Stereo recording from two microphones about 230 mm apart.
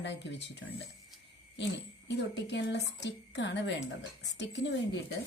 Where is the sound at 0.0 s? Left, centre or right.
Left.